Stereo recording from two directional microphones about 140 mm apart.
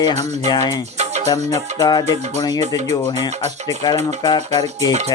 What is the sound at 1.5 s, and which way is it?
Music, 30° left (ahead or behind).